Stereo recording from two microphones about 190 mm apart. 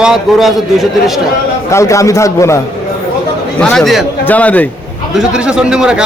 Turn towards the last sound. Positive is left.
turn(degrees=-5)  # may be behind; listen again after turning